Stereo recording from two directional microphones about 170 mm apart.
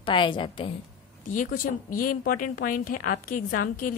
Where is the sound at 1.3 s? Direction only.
55° left (ahead or behind).